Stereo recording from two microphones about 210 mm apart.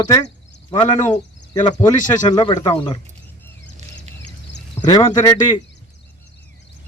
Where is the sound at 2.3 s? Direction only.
20° left (ahead or behind).